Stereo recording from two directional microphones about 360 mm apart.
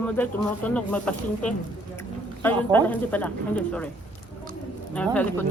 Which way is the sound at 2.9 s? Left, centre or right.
Centre.